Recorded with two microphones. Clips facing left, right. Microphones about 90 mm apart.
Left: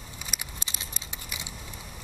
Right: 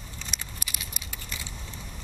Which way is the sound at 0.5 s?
30° left (ahead or behind).